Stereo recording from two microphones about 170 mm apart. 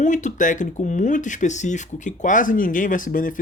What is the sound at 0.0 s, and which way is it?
Speech, 45° left (ahead or behind).